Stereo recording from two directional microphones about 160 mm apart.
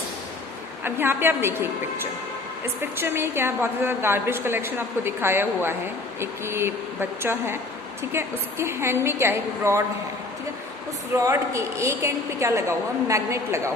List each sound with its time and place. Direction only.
0.9 s a woman's voice: 15° right (ahead or behind)
2.8 s a woman's voice: 15° right (ahead or behind)
11.1 s a woman's voice: 20° right (ahead or behind)